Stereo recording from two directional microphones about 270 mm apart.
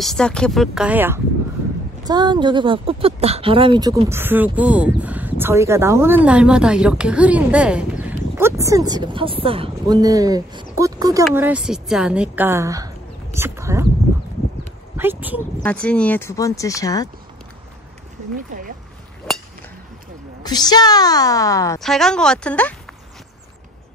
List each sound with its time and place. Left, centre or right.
0.0 s a woman's voice: centre
15.0 s speech: centre
15.6 s speech: centre
18.3 s speech: right
19.3 s a sound: centre
20.4 s speech: centre
21.8 s speech: centre